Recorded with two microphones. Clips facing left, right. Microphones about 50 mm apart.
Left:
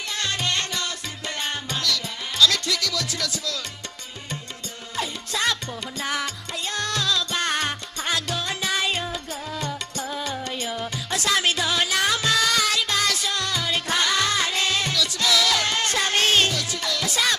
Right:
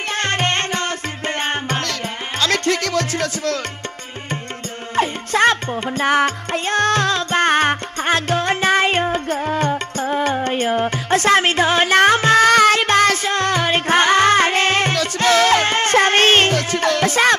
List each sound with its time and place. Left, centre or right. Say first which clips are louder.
0.1 s music: right 7 dB; right
4.9 s music: right 11 dB; right